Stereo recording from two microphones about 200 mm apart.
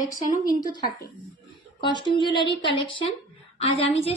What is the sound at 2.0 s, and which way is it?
A woman's voice, 25° left (ahead or behind).